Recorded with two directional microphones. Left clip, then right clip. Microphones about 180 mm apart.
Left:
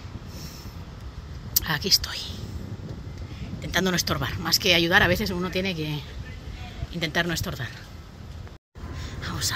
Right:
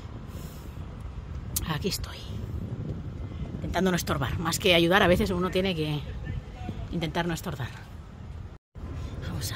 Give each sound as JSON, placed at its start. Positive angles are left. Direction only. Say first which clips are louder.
{"t": 1.5, "sound": "speech", "louder": "left 9 dB", "side_deg": -10}
{"t": 2.0, "sound": "speech", "louder": "left 9 dB", "side_deg": 5}
{"t": 3.8, "sound": "speech", "louder": "left 2 dB", "side_deg": -15}
{"t": 6.9, "sound": "speech", "louder": "left 5 dB", "side_deg": -5}
{"t": 9.2, "sound": "a sound", "louder": "left 9 dB", "side_deg": -10}